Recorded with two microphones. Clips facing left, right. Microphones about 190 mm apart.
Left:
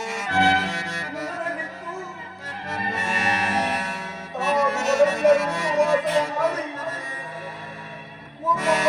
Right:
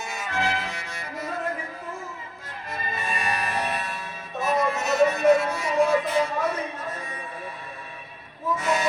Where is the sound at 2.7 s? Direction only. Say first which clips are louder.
Left 3 dB; 80° left.